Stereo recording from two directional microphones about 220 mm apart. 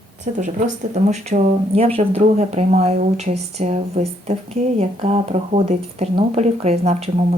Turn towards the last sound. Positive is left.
turn(degrees=-30)  # may be behind; listen again after turning